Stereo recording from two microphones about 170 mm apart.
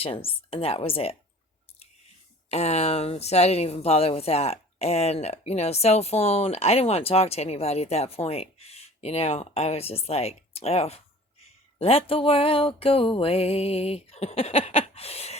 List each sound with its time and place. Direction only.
0.0 s speech: 35° left (ahead or behind)
2.5 s speech: 40° left (ahead or behind)